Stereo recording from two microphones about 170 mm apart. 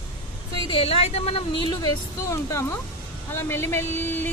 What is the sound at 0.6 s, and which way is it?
Speech, 30° left (ahead or behind).